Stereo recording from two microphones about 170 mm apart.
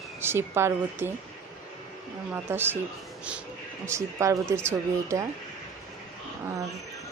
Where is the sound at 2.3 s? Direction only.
10° right (ahead or behind).